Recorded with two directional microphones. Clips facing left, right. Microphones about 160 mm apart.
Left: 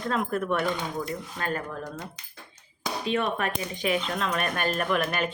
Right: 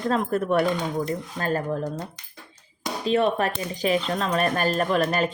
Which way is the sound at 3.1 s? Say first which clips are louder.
Right 6 dB; 35° right (ahead or behind).